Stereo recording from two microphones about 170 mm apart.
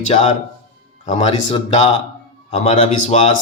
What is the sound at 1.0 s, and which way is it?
A man's voice, 40° left (ahead or behind).